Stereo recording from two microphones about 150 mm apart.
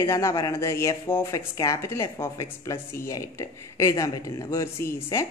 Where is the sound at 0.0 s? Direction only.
20° left (ahead or behind).